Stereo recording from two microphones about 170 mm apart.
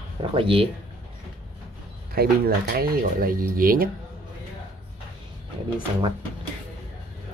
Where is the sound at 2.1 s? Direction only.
65° right (ahead or behind).